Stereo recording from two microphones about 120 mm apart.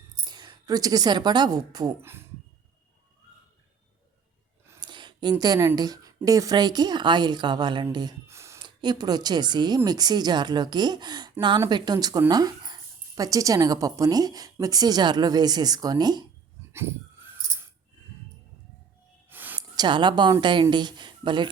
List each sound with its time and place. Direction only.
0.3 s a woman's voice: 35° right (ahead or behind)
2.0 s speech: 20° right (ahead or behind)
4.8 s a sound: 40° right (ahead or behind)
5.7 s a woman's voice: 30° right (ahead or behind)
8.3 s a sound: 25° right (ahead or behind)
8.6 s a woman's voice: 35° right (ahead or behind)
16.7 s a sound: 20° right (ahead or behind)
19.3 s sigh: 15° right (ahead or behind)
19.7 s a woman's voice: 40° right (ahead or behind)